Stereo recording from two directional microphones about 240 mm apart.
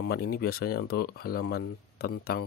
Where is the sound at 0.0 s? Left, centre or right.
Left.